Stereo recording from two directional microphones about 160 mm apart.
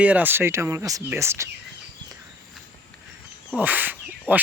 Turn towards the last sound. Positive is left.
turn(degrees=-10)  # may be behind; listen again after turning